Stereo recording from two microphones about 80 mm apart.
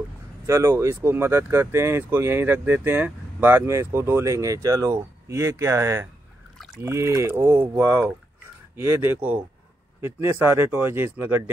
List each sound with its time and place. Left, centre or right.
0.5 s speech: right
10.0 s speech: right